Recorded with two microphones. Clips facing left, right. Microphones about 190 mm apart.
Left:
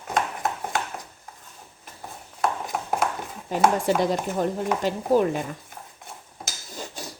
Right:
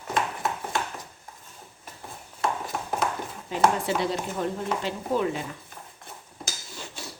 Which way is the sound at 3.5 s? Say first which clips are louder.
Left 3 dB; 45° left (ahead or behind).